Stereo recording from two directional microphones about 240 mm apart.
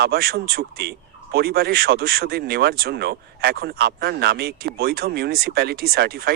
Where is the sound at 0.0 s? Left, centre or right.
Right.